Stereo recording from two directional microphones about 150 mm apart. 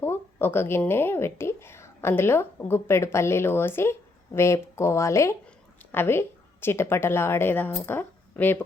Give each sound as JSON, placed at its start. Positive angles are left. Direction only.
{"t": 0.0, "sound": "a woman's voice", "side_deg": 15}